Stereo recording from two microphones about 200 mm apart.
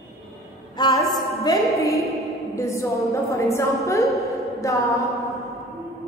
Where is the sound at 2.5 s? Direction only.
15° left (ahead or behind).